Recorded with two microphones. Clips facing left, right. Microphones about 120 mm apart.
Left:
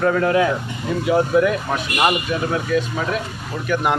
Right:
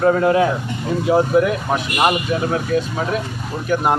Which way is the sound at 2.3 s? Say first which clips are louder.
Right 1 dB; 35° right (ahead or behind).